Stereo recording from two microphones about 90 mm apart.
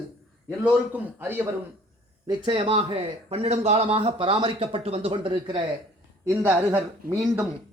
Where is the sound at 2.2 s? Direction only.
50° right (ahead or behind).